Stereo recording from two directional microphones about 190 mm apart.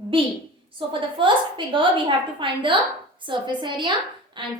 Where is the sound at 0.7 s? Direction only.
25° right (ahead or behind).